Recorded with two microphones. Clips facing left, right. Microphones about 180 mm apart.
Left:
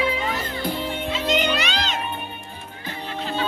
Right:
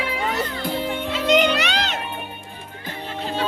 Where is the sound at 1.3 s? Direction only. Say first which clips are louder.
Right 5 dB; 70° right (ahead or behind).